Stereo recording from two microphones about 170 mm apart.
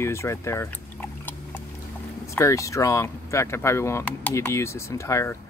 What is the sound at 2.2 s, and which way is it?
Speech, 15° left (ahead or behind).